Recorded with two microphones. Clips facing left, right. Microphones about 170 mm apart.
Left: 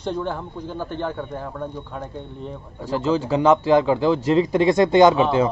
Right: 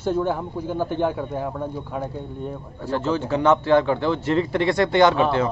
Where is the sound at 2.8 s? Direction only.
10° left (ahead or behind).